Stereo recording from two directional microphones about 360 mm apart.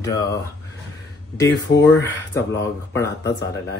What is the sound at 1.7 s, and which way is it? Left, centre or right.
Speech, left.